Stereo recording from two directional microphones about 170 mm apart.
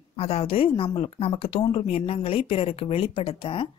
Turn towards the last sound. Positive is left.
turn(degrees=35)  # may be behind; listen again after turning